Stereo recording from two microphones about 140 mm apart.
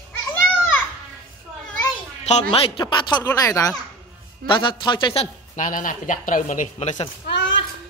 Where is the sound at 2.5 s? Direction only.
40° left (ahead or behind); by 3.7 s 25° left (ahead or behind).